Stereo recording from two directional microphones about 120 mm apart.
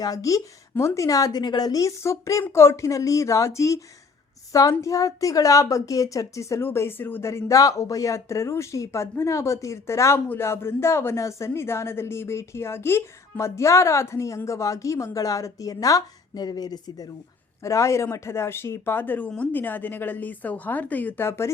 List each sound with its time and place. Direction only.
0.0 s a woman's voice: 30° left (ahead or behind)